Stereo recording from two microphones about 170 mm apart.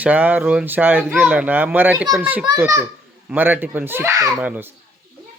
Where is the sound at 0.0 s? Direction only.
10° right (ahead or behind).